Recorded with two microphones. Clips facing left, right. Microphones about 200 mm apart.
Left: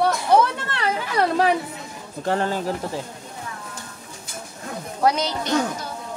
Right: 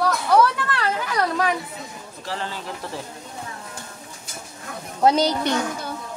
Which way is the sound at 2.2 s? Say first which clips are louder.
Left 9 dB; 50° left (ahead or behind).